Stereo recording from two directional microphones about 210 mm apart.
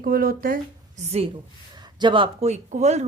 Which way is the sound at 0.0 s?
45° right (ahead or behind).